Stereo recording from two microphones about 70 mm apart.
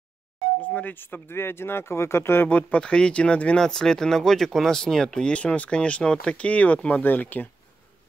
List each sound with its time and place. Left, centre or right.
0.6 s speech: left
2.8 s speech: centre